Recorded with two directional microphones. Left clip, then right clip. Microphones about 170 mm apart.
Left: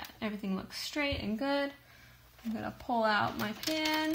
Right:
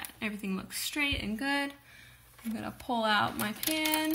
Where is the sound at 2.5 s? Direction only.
10° left (ahead or behind).